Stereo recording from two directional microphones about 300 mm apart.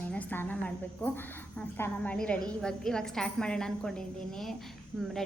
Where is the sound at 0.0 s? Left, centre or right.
Centre.